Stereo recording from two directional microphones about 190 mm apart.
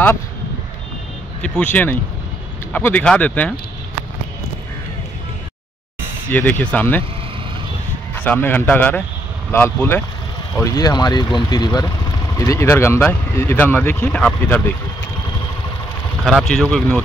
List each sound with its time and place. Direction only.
1.4 s speech: 5° left (ahead or behind)
6.3 s speech: 5° left (ahead or behind)
8.1 s a man's voice: 10° left (ahead or behind)
16.3 s speech: centre (ahead or behind)